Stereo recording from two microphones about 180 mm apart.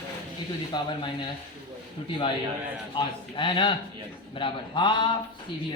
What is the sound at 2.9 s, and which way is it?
A man's voice, 25° left (ahead or behind).